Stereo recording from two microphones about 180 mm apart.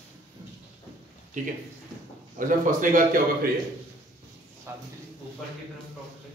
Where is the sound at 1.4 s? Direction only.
45° right (ahead or behind).